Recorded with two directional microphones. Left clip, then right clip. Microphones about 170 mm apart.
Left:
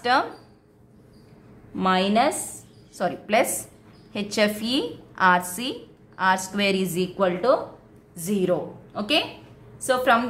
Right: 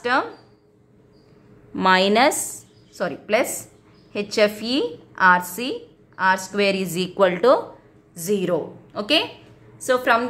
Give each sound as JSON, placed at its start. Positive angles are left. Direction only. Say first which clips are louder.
{"t": 0.0, "sound": "speech", "louder": "even", "side_deg": -15}
{"t": 1.8, "sound": "speech", "louder": "right 5 dB", "side_deg": -35}
{"t": 2.9, "sound": "a woman's voice", "louder": "right 1 dB", "side_deg": -15}